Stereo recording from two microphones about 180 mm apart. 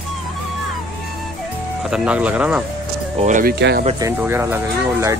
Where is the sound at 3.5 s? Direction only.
70° right (ahead or behind).